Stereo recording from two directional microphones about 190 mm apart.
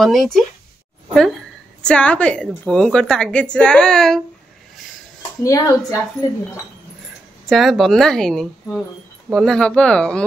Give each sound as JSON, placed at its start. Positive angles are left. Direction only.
{"t": 0.0, "sound": "a woman's voice", "side_deg": 0}
{"t": 1.8, "sound": "a woman's voice", "side_deg": 5}
{"t": 5.4, "sound": "speech", "side_deg": 15}
{"t": 7.4, "sound": "a woman's voice", "side_deg": 0}